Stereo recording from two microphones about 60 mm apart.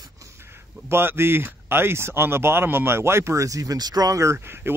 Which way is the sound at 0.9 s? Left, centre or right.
Right.